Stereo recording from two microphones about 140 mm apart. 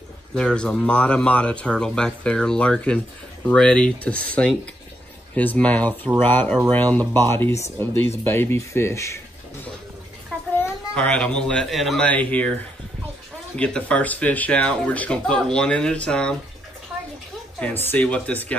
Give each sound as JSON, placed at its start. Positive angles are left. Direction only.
{"t": 0.3, "sound": "speech", "side_deg": 5}
{"t": 10.3, "sound": "a sound", "side_deg": 5}
{"t": 11.0, "sound": "speech", "side_deg": 5}
{"t": 13.6, "sound": "speech", "side_deg": 10}
{"t": 17.6, "sound": "speech", "side_deg": 10}